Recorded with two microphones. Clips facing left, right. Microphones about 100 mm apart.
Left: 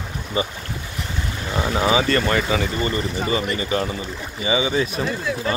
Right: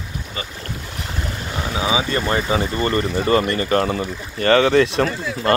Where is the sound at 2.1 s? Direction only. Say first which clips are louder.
Left 1 dB; 15° right (ahead or behind).